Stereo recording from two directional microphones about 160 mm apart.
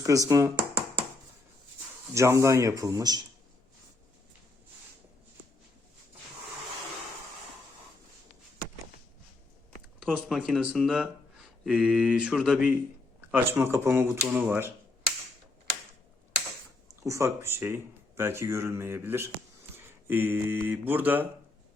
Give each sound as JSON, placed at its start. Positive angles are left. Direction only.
{"t": 0.0, "sound": "speech", "side_deg": -20}
{"t": 2.1, "sound": "speech", "side_deg": -20}
{"t": 10.0, "sound": "speech", "side_deg": -5}
{"t": 17.0, "sound": "speech", "side_deg": -20}